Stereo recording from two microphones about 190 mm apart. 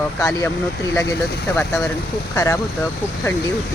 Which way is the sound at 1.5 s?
15° left (ahead or behind).